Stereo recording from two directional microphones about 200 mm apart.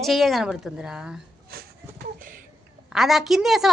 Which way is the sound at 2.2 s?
40° right (ahead or behind).